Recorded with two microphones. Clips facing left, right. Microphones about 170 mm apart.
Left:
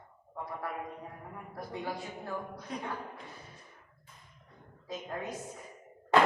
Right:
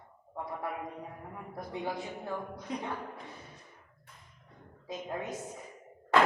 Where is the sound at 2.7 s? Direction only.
20° right (ahead or behind).